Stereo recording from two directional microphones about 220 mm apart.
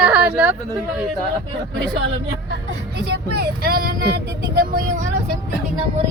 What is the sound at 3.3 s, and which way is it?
Speech, 45° right (ahead or behind).